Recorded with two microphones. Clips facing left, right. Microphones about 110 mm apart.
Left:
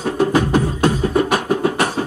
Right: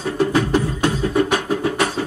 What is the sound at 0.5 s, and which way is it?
Beatboxing, 45° left (ahead or behind).